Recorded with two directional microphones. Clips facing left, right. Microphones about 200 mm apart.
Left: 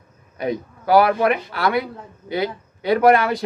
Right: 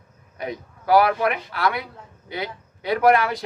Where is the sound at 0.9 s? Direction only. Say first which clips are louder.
Left 3 dB; 30° left (ahead or behind).